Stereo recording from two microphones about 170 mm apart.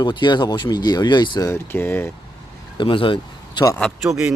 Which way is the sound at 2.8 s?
30° left (ahead or behind).